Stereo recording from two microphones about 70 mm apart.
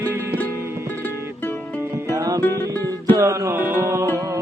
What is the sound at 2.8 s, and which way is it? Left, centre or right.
Music, right.